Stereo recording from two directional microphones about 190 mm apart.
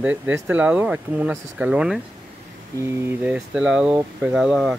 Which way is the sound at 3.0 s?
10° right (ahead or behind).